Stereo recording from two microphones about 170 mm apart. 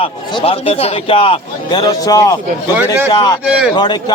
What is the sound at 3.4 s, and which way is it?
Speech, 5° right (ahead or behind).